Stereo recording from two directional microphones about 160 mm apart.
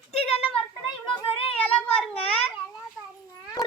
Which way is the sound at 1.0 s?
30° left (ahead or behind).